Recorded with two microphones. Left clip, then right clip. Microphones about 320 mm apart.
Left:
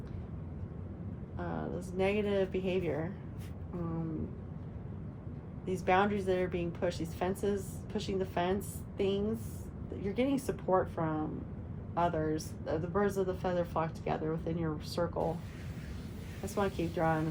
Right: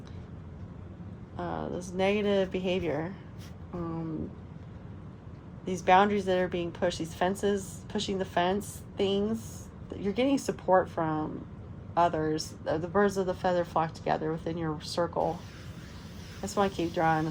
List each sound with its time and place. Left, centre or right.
1.4 s speech: right
5.6 s a woman's voice: right
16.6 s a woman's voice: right